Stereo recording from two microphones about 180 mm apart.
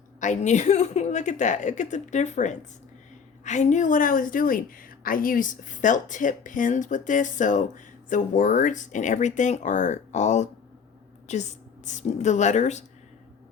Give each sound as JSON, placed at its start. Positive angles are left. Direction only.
{"t": 0.2, "sound": "a woman's voice", "side_deg": 40}